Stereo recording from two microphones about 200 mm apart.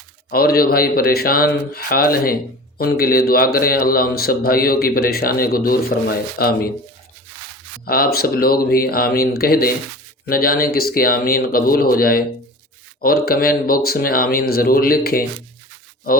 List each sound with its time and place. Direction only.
0.3 s a man's voice: 50° left (ahead or behind)
7.9 s a man's voice: 50° left (ahead or behind)